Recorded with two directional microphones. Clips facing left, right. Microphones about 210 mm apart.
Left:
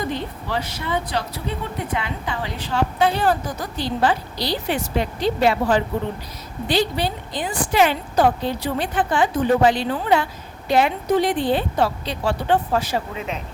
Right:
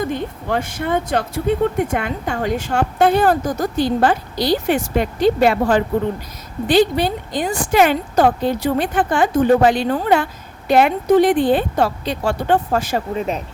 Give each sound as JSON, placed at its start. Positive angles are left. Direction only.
{"t": 0.0, "sound": "speech", "side_deg": -50}